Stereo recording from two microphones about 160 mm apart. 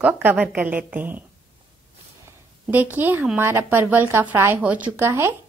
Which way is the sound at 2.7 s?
10° right (ahead or behind).